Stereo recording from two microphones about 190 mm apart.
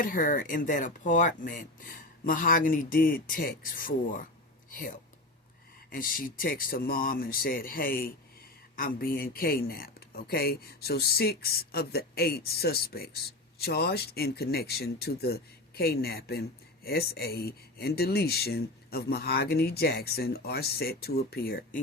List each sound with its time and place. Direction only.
0.0 s speech: 45° left (ahead or behind)